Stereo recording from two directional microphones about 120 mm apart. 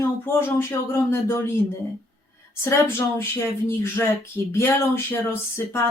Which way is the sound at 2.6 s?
20° left (ahead or behind).